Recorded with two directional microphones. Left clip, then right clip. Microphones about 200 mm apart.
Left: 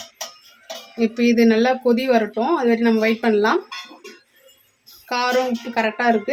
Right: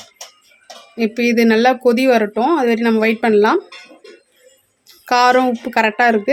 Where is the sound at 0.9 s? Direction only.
50° right (ahead or behind).